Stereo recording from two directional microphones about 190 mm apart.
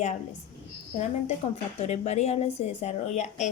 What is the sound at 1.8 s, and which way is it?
A woman's voice, 35° left (ahead or behind).